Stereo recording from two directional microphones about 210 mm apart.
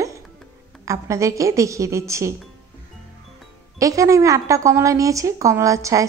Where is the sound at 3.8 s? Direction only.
15° right (ahead or behind).